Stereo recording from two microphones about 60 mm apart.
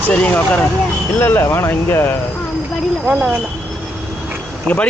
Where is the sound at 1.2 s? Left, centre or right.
Left.